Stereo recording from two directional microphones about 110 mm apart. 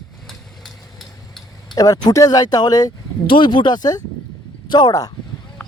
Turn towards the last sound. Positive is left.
turn(degrees=40)  # may be behind; listen again after turning